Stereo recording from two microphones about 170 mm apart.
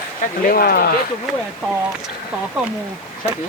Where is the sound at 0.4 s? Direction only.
60° left (ahead or behind).